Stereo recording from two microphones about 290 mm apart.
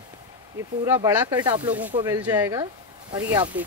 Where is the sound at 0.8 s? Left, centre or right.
Centre.